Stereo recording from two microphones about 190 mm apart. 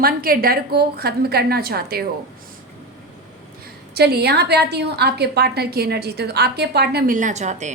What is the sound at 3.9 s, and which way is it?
A woman's voice, 55° right (ahead or behind).